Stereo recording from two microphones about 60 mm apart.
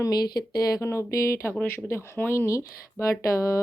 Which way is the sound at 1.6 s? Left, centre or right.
Left.